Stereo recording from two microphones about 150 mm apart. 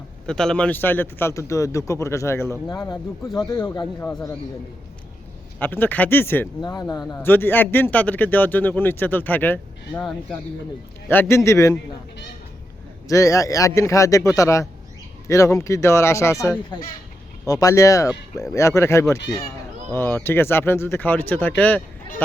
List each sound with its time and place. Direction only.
0.3 s speech: 5° left (ahead or behind); by 3.8 s 25° left (ahead or behind)
5.5 s speech: 15° left (ahead or behind)
6.6 s speech: 25° left (ahead or behind)
7.2 s speech: 15° left (ahead or behind)
11.1 s speech: 15° left (ahead or behind)
13.1 s speech: 20° left (ahead or behind)